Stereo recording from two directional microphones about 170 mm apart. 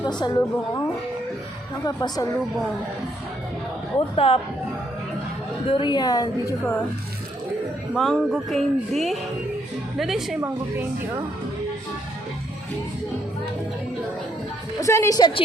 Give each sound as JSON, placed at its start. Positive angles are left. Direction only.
{"t": 0.2, "sound": "a woman's voice", "side_deg": 20}
{"t": 3.9, "sound": "speech", "side_deg": 35}
{"t": 5.6, "sound": "a woman's voice", "side_deg": 30}
{"t": 7.9, "sound": "music", "side_deg": 0}
{"t": 14.8, "sound": "a woman's voice", "side_deg": 20}